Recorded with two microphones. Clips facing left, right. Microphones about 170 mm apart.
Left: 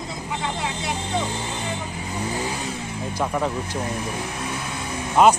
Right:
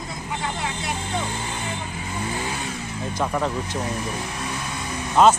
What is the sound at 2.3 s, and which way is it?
Vehicle, 35° left (ahead or behind).